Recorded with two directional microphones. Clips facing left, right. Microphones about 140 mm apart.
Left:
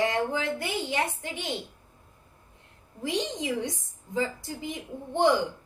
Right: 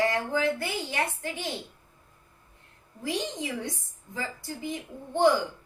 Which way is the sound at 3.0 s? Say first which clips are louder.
Left 2 dB; 20° left (ahead or behind).